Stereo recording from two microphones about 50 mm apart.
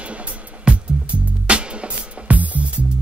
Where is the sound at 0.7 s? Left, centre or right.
Right.